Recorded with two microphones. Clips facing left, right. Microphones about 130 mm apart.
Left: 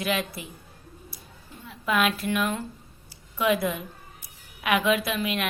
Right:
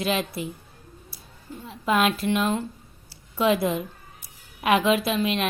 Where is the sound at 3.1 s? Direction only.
30° right (ahead or behind).